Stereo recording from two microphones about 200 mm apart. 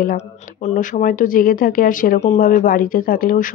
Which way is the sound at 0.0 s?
40° left (ahead or behind).